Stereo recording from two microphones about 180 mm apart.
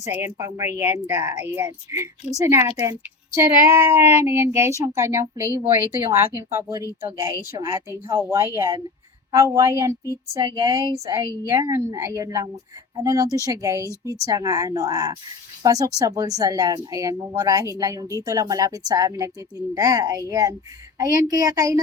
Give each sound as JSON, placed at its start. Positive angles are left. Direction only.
{"t": 0.0, "sound": "a woman's voice", "side_deg": -15}